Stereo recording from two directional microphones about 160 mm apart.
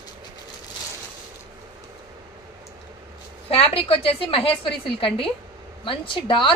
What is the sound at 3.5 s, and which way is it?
A woman's voice, 35° left (ahead or behind).